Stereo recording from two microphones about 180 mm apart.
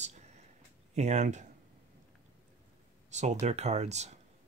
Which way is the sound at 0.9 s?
40° right (ahead or behind).